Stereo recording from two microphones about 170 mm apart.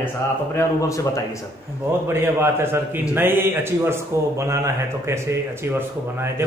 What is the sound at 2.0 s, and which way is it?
A man's voice, 15° right (ahead or behind).